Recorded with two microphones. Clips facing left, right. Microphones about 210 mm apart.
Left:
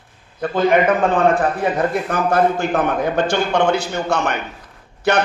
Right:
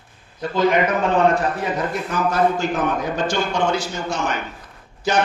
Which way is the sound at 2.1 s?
55° left (ahead or behind).